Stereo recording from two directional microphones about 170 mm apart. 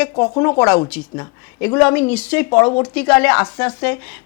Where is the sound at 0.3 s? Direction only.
25° left (ahead or behind).